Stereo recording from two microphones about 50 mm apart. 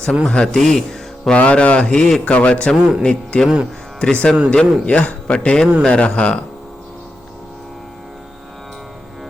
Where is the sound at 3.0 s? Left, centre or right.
Centre.